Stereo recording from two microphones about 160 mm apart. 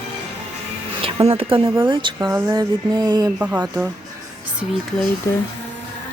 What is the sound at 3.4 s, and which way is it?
Speech, 10° right (ahead or behind).